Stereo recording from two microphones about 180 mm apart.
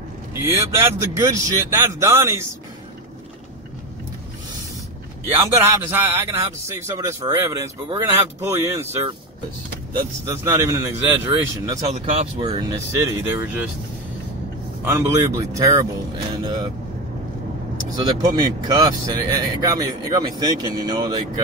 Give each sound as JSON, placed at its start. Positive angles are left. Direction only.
{"t": 0.3, "sound": "speech", "side_deg": -15}
{"t": 5.3, "sound": "speech", "side_deg": -10}
{"t": 10.2, "sound": "speech", "side_deg": -15}
{"t": 11.9, "sound": "speech", "side_deg": -35}
{"t": 12.4, "sound": "speech", "side_deg": -20}
{"t": 14.9, "sound": "speech", "side_deg": -15}
{"t": 17.9, "sound": "speech", "side_deg": -20}